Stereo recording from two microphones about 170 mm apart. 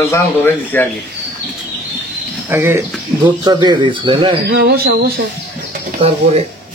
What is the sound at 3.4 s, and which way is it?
Speech, 25° right (ahead or behind).